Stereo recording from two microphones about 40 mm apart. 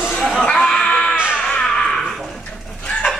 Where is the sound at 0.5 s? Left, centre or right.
Centre.